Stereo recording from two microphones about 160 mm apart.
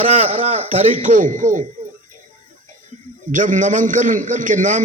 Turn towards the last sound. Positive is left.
turn(degrees=-50)  # may be behind; listen again after turning